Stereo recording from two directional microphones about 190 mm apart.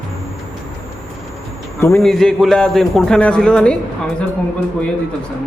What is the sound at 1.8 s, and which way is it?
A man's voice, 5° left (ahead or behind).